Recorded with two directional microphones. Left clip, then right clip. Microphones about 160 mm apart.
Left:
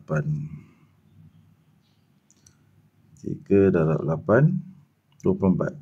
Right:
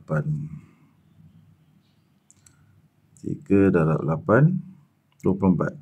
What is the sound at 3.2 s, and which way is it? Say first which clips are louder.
Speech: left 1 dB; 20° right (ahead or behind).